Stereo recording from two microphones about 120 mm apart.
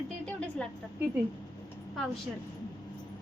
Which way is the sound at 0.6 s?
10° left (ahead or behind).